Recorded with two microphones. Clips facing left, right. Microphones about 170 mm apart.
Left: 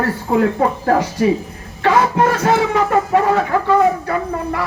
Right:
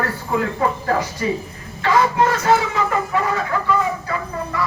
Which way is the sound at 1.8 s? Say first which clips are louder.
Left 2 dB; 55° left (ahead or behind).